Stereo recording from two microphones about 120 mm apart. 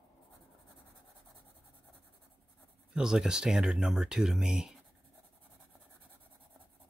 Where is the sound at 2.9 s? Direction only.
5° right (ahead or behind).